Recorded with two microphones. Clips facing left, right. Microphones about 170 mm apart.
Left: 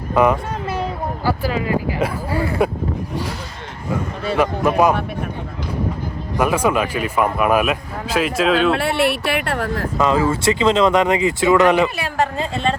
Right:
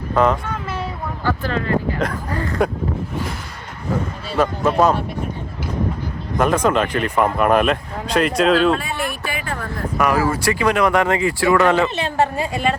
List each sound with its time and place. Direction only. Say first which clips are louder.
0.1 s a child's voice: left 1 dB; 10° left (ahead or behind)
4.4 s speech: even; 10° left (ahead or behind)
6.3 s speech: right 1 dB; 10° left (ahead or behind)
8.7 s speech: left 5 dB; 75° left (ahead or behind)
10.0 s speech: left 1 dB; 25° left (ahead or behind)
12.0 s a woman's voice: right 2 dB; 20° right (ahead or behind)